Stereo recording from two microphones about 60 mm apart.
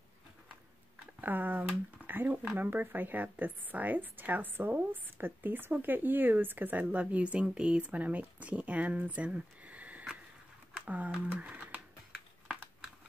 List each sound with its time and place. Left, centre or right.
1.2 s speech: right